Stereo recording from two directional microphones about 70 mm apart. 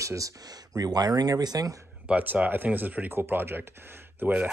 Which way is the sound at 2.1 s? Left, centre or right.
Right.